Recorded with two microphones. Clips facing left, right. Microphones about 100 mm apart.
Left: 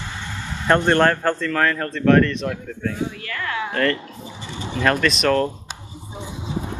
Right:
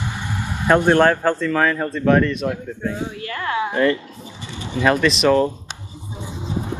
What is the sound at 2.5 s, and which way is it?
Speech, 25° right (ahead or behind).